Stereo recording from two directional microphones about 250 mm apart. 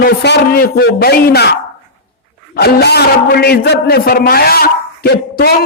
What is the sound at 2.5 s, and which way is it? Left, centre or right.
A man's voice, left.